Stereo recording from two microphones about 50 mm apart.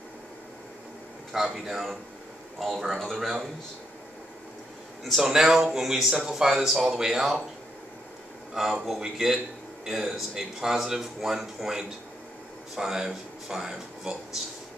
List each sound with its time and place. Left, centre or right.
1.3 s speech: centre
5.0 s speech: centre
8.6 s speech: centre